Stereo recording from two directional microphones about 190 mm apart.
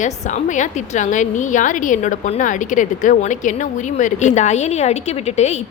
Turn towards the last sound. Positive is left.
turn(degrees=35)  # may be behind; listen again after turning